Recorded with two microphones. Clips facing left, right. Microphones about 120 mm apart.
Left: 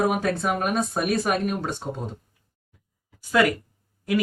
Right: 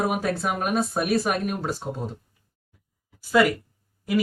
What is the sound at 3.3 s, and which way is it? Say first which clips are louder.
Speech: right 1 dB; 5° right (ahead or behind).